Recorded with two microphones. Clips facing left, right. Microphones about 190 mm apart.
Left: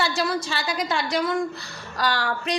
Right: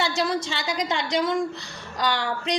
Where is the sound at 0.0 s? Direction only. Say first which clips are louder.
Even; 20° right (ahead or behind).